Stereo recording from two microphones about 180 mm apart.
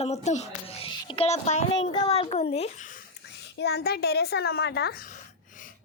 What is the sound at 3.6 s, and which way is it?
A child's voice, 65° left (ahead or behind).